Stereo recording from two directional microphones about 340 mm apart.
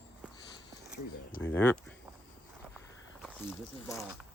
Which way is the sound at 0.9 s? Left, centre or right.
Left.